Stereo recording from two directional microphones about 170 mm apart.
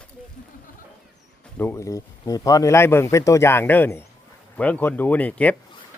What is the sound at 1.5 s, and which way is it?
Speech, 15° left (ahead or behind).